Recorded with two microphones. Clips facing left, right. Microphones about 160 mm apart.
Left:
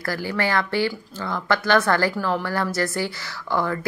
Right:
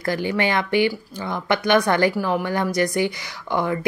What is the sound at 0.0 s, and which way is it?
A woman's voice, 20° right (ahead or behind).